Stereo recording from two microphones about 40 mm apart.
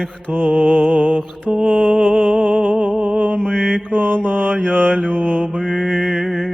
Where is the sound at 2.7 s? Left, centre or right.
Right.